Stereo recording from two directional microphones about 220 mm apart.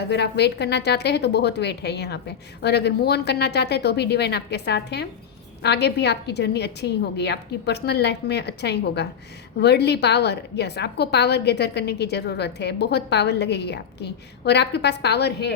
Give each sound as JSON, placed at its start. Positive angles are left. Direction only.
{"t": 0.1, "sound": "a woman's voice", "side_deg": 50}